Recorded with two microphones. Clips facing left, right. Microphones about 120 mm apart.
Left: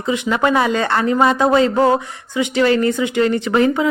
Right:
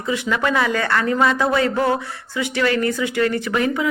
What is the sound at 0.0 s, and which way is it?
Speech, 25° left (ahead or behind).